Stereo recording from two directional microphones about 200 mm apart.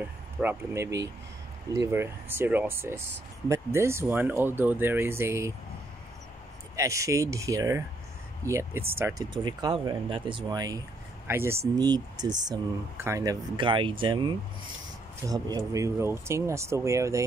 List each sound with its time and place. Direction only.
0.4 s speech: 10° right (ahead or behind)
6.8 s speech: 15° right (ahead or behind)